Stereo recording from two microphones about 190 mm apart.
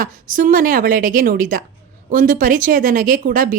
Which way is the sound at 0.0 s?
45° right (ahead or behind).